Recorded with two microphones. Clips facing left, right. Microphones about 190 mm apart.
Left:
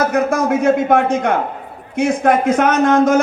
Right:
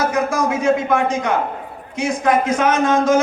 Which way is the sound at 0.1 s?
60° left (ahead or behind).